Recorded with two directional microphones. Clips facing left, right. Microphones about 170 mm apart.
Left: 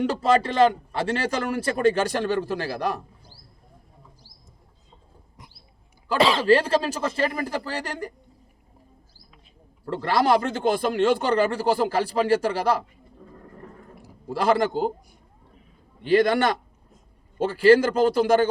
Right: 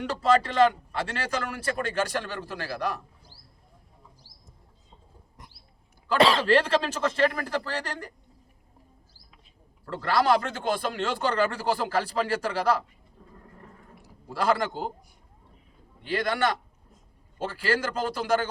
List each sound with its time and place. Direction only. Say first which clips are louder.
0.1 s a man's voice: left 2 dB; 15° left (ahead or behind)
6.1 s a man's voice: left 2 dB; centre (ahead or behind)
9.8 s a man's voice: left 2 dB; 20° left (ahead or behind)
14.3 s a man's voice: left 4 dB; 20° left (ahead or behind)
16.0 s a man's voice: left 7 dB; 20° left (ahead or behind)